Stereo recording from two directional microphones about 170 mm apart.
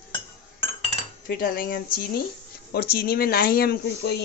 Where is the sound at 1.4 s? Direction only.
55° left (ahead or behind).